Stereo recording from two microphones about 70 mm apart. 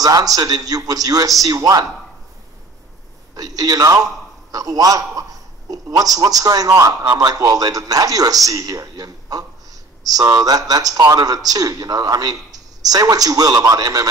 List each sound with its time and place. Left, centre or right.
0.0 s a man's voice: right
3.3 s a man's voice: right